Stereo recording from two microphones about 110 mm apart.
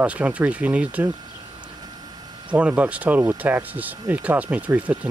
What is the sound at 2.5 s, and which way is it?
Speech, 15° right (ahead or behind).